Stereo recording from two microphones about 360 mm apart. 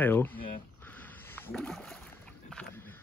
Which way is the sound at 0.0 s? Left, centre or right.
Centre.